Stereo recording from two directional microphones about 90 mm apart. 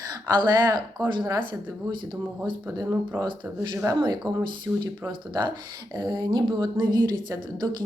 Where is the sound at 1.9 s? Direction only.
65° right (ahead or behind).